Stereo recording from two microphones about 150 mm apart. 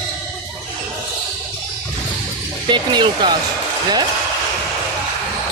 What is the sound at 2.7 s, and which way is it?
Speech, 30° right (ahead or behind).